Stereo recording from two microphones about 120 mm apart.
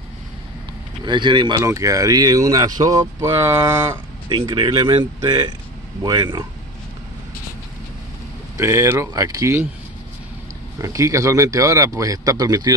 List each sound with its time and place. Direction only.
1.0 s speech: 40° right (ahead or behind)
1.6 s speech: 25° right (ahead or behind)
4.3 s speech: 40° right (ahead or behind)
8.5 s speech: 25° right (ahead or behind)
10.8 s speech: 25° right (ahead or behind)